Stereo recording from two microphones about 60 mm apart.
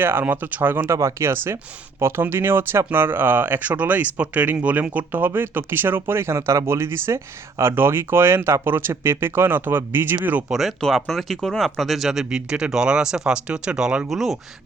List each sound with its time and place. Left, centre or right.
0.0 s speech: right
10.5 s speech: centre
14.1 s speech: centre